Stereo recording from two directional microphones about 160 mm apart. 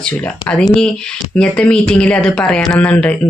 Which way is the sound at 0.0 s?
10° left (ahead or behind).